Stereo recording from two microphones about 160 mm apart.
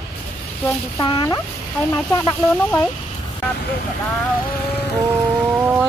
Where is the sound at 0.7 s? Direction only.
25° left (ahead or behind).